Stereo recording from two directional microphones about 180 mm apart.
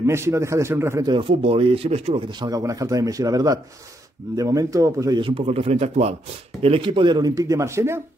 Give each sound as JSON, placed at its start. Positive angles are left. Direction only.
{"t": 0.0, "sound": "a man's voice", "side_deg": -15}
{"t": 1.1, "sound": "speech", "side_deg": -30}
{"t": 2.4, "sound": "a man's voice", "side_deg": -20}